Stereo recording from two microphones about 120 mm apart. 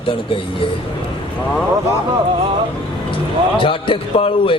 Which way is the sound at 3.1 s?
45° left (ahead or behind).